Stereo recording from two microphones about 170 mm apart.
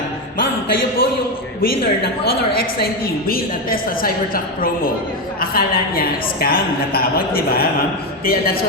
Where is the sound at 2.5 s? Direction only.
60° left (ahead or behind).